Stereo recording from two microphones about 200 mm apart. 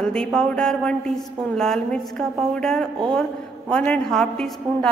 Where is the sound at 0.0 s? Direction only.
5° left (ahead or behind).